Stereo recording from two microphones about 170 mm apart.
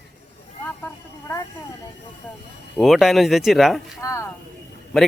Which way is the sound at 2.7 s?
Centre (ahead or behind).